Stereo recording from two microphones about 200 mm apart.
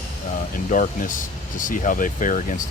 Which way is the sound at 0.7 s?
40° left (ahead or behind).